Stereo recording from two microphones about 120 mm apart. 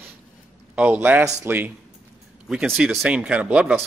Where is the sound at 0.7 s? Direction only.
10° right (ahead or behind).